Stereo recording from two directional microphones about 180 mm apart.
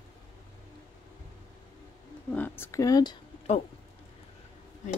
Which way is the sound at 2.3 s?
10° left (ahead or behind).